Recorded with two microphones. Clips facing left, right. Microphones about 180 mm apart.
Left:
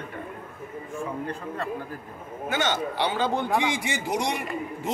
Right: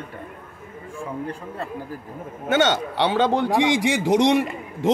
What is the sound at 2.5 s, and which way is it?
A man's voice, 75° right (ahead or behind).